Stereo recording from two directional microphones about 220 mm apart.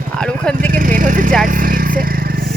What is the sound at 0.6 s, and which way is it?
Speech, 40° right (ahead or behind).